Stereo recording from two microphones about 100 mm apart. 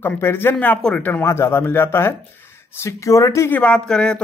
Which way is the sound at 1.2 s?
25° left (ahead or behind).